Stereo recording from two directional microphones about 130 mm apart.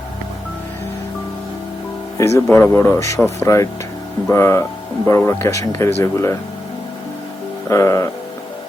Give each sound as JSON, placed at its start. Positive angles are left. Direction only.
{"t": 2.1, "sound": "speech", "side_deg": 20}
{"t": 7.7, "sound": "speech", "side_deg": 20}